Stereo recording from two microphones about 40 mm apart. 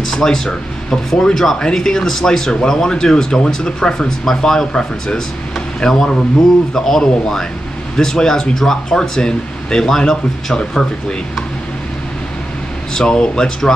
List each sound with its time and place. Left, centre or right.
0.1 s speech: centre
12.9 s speech: centre